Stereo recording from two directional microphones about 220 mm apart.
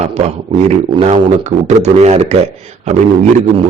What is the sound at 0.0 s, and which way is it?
Speech, 30° right (ahead or behind).